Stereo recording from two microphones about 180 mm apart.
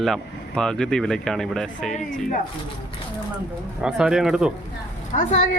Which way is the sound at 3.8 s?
5° right (ahead or behind).